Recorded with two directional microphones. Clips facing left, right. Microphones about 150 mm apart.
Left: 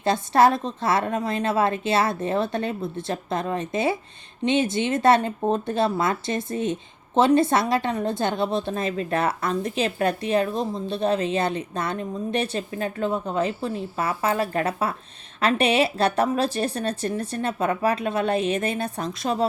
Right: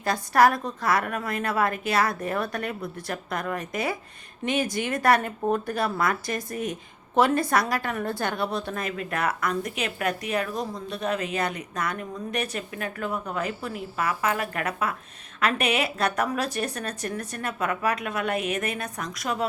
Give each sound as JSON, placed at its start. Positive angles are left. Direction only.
{"t": 0.0, "sound": "speech", "side_deg": 25}